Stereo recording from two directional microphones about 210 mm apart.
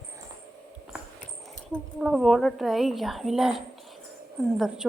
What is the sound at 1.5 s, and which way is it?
A woman's voice, centre (ahead or behind).